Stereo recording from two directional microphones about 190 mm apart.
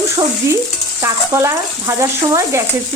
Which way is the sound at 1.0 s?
15° right (ahead or behind).